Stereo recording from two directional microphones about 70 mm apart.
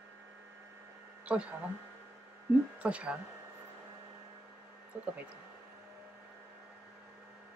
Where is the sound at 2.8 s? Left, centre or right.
Centre.